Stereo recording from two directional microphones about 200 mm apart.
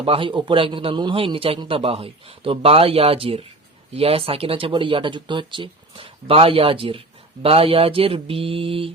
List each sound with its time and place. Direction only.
0.0 s a man's voice: 25° right (ahead or behind)